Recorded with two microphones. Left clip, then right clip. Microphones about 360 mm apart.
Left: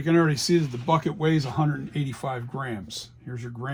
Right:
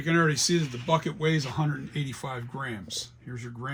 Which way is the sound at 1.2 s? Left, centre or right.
Centre.